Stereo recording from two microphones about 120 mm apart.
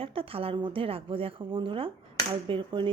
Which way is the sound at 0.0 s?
50° right (ahead or behind).